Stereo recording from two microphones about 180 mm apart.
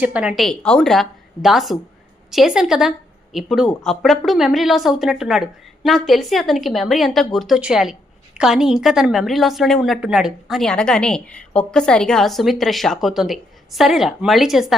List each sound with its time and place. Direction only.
0.0 s a woman's voice: 5° right (ahead or behind)